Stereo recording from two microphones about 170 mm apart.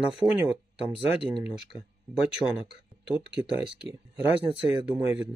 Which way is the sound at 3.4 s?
5° right (ahead or behind).